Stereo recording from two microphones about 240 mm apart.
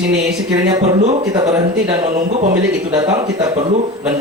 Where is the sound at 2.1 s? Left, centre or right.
Right.